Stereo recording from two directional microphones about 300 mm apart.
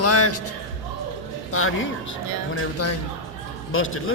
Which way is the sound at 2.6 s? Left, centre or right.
Left.